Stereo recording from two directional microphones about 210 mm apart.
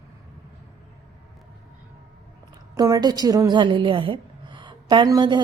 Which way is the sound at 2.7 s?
15° right (ahead or behind).